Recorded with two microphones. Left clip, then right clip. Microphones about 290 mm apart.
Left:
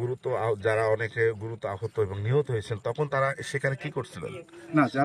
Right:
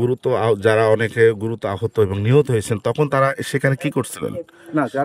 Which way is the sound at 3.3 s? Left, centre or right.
Right.